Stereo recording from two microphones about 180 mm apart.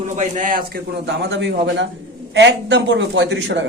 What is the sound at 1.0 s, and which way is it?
A man's voice, 70° right (ahead or behind).